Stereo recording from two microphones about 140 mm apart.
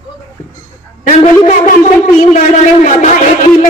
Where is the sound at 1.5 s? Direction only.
60° left (ahead or behind).